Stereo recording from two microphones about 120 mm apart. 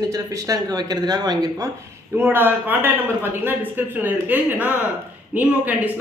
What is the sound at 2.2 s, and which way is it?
Speech, 15° right (ahead or behind).